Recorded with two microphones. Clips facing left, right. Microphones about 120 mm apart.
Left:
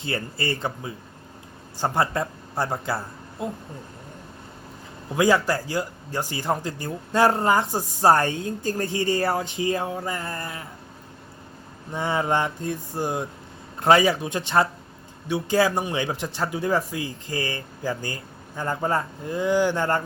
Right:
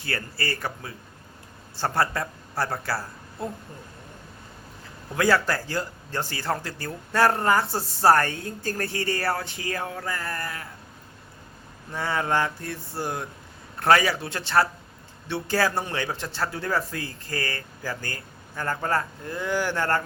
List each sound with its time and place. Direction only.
0.0 s speech: 20° left (ahead or behind)
5.1 s speech: 15° left (ahead or behind)
11.9 s speech: 20° left (ahead or behind)